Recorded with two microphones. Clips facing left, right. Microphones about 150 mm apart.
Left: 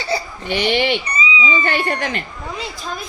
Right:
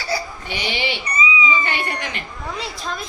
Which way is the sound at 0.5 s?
55° left (ahead or behind).